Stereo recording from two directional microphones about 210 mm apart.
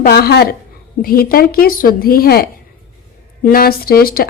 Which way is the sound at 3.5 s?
45° left (ahead or behind).